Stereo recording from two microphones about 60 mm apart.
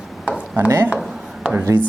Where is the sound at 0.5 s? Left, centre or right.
Right.